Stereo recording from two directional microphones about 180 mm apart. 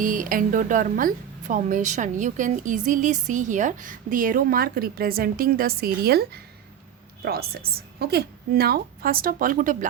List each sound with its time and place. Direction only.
0.0 s a woman's voice: 50° right (ahead or behind)